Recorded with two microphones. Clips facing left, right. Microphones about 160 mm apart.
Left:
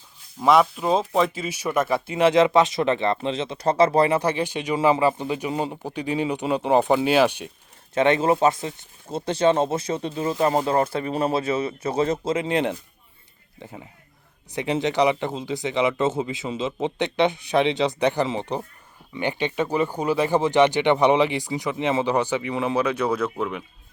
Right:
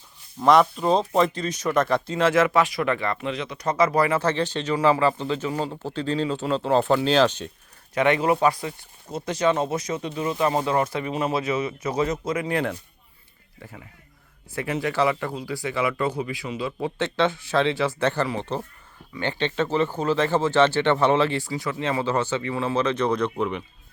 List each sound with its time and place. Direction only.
0.3 s speech: 5° left (ahead or behind); by 4.2 s 25° left (ahead or behind)
4.2 s speech: 10° left (ahead or behind)
7.9 s speech: 25° left (ahead or behind); by 23.6 s centre (ahead or behind)